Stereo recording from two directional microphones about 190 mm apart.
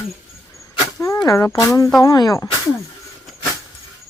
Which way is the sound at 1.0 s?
15° left (ahead or behind).